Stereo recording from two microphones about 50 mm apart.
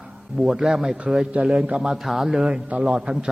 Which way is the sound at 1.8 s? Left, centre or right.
Centre.